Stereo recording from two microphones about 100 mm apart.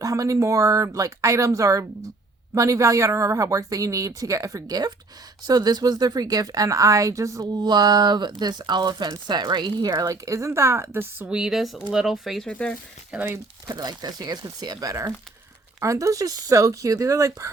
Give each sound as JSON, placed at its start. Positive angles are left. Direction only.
{"t": 0.0, "sound": "speech", "side_deg": -35}
{"t": 11.3, "sound": "speech", "side_deg": -5}
{"t": 12.5, "sound": "speech", "side_deg": 15}
{"t": 13.1, "sound": "speech", "side_deg": -10}
{"t": 13.7, "sound": "speech", "side_deg": -40}